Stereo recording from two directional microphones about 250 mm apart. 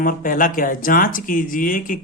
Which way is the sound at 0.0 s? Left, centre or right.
Left.